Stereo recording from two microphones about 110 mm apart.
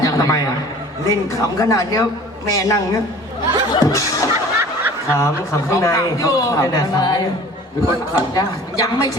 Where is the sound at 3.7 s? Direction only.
35° left (ahead or behind).